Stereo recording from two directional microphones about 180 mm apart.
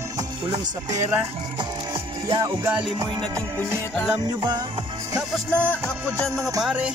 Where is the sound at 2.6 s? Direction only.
5° right (ahead or behind).